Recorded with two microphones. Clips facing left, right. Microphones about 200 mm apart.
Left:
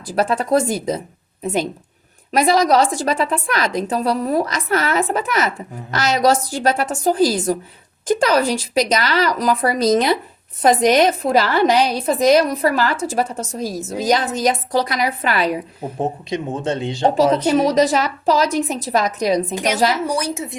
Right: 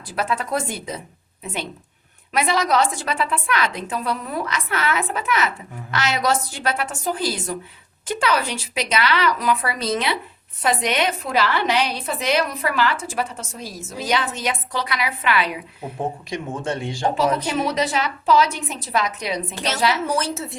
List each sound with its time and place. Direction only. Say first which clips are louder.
0.1 s a woman's voice: left 7 dB; 40° left (ahead or behind)
2.3 s a woman's voice: left 6 dB; 40° left (ahead or behind)
16.0 s speech: left 4 dB; 20° left (ahead or behind)
17.4 s a woman's voice: left 8 dB; 40° left (ahead or behind)
19.5 s a woman's voice: left 4 dB; 15° left (ahead or behind)